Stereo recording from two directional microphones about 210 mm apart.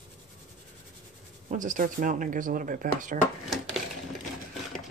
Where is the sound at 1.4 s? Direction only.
35° right (ahead or behind).